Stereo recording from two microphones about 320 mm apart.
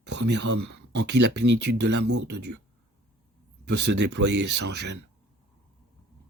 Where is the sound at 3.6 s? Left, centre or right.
Right.